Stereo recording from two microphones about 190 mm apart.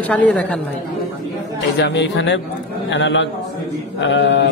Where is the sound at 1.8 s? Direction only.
65° left (ahead or behind).